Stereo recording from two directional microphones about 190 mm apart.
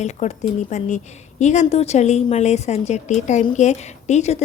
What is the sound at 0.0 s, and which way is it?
A woman's voice, 35° left (ahead or behind).